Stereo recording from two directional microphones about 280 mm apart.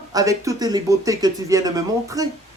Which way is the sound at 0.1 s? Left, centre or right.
Centre.